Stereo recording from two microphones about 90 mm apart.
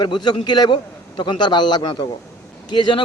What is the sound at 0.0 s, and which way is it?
A man's voice, 55° left (ahead or behind).